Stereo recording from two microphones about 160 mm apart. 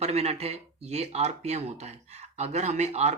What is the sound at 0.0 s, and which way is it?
Speech, 40° right (ahead or behind).